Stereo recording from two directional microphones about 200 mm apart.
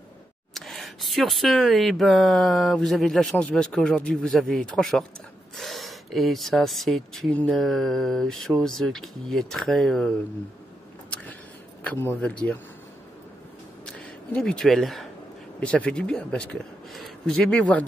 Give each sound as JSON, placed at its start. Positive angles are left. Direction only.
{"t": 0.6, "sound": "speech", "side_deg": 0}
{"t": 11.8, "sound": "speech", "side_deg": 10}
{"t": 13.8, "sound": "speech", "side_deg": 5}